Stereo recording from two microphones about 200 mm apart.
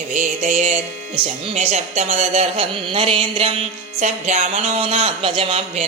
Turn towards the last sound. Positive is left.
turn(degrees=-30)  # may be behind; listen again after turning